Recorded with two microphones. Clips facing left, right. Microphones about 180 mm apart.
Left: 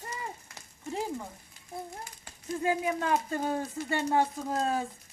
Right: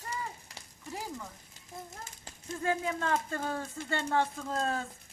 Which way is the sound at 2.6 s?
15° left (ahead or behind).